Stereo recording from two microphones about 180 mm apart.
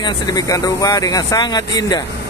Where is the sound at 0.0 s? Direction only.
20° left (ahead or behind).